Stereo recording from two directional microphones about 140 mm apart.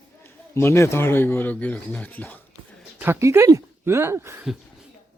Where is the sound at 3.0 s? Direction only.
20° right (ahead or behind).